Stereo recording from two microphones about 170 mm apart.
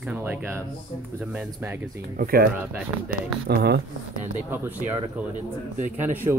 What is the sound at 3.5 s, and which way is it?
Speech, 70° right (ahead or behind).